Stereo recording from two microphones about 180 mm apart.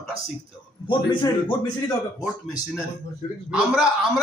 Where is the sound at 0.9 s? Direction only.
25° left (ahead or behind).